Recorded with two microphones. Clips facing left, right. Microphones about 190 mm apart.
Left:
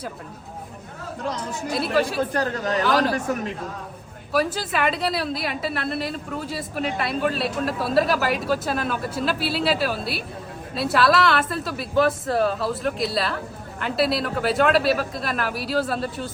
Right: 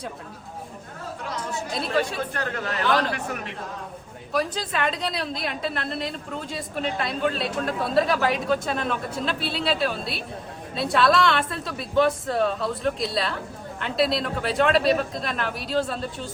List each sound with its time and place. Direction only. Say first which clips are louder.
2.3 s a man's voice: left 6 dB; 40° left (ahead or behind)
4.3 s a woman's voice: left 3 dB; 5° left (ahead or behind)